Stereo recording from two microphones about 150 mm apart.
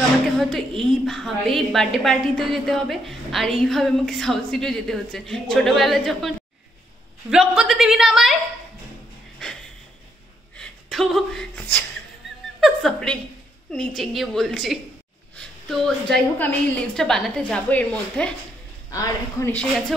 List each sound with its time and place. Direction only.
0.4 s a woman's voice: centre (ahead or behind)
10.5 s a woman's voice: 5° left (ahead or behind)
18.9 s speech: 20° left (ahead or behind)